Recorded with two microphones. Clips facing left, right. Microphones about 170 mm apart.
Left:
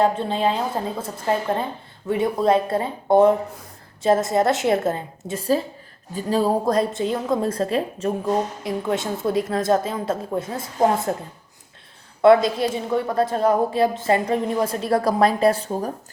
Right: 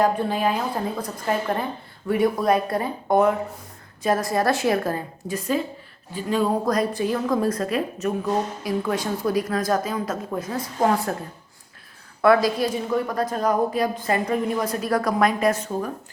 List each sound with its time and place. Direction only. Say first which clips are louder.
0.0 s a woman's voice: left 1 dB; 25° left (ahead or behind)
12.2 s a woman's voice: left 3 dB; 25° left (ahead or behind)